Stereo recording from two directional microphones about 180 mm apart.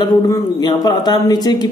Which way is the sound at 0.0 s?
20° left (ahead or behind).